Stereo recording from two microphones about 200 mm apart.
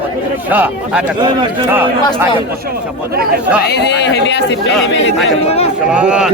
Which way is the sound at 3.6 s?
55° left (ahead or behind).